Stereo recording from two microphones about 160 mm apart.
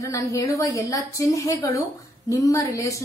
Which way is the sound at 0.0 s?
20° left (ahead or behind).